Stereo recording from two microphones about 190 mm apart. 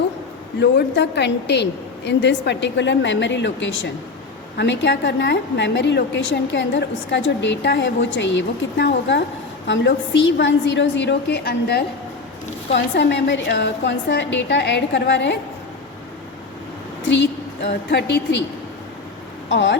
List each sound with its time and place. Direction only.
0.6 s a woman's voice: 65° left (ahead or behind)
4.5 s a woman's voice: 70° left (ahead or behind)
17.1 s a woman's voice: 65° left (ahead or behind)
19.5 s speech: 70° left (ahead or behind)